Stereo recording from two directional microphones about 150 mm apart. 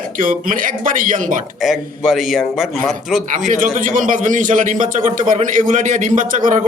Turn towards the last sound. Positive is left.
turn(degrees=-60)  # may be behind; listen again after turning